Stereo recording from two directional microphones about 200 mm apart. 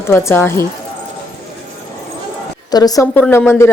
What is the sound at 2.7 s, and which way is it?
Speech, 20° left (ahead or behind).